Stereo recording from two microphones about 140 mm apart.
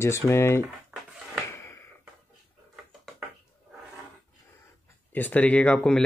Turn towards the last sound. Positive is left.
turn(degrees=10)  # may be behind; listen again after turning